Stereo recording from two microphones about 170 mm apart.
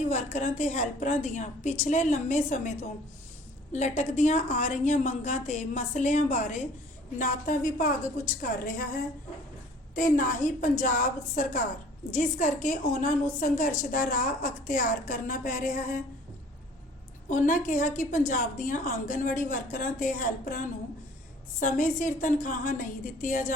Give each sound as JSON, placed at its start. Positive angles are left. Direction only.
{"t": 0.1, "sound": "a woman's voice", "side_deg": 45}
{"t": 17.2, "sound": "a woman's voice", "side_deg": 50}